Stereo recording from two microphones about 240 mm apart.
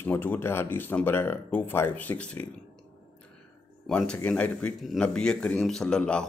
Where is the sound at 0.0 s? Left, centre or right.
Centre.